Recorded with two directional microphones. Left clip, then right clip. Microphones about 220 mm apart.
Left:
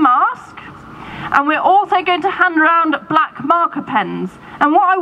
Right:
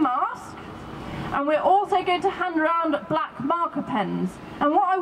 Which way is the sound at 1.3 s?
25° left (ahead or behind).